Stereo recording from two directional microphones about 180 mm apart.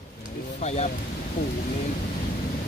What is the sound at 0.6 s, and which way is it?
Speech, 40° left (ahead or behind).